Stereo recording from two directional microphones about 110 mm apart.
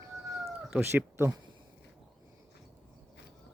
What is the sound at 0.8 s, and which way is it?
Speech, 20° right (ahead or behind).